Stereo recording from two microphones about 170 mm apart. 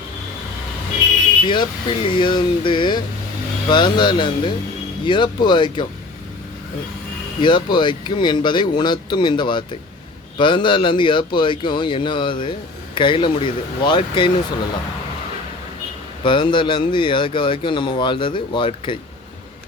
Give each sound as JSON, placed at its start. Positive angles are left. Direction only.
{"t": 1.5, "sound": "speech", "side_deg": 30}
{"t": 7.4, "sound": "speech", "side_deg": 30}
{"t": 16.2, "sound": "speech", "side_deg": 30}